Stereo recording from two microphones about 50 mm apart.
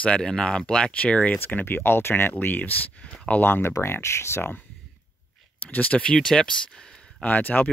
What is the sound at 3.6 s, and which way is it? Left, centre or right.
Speech, left.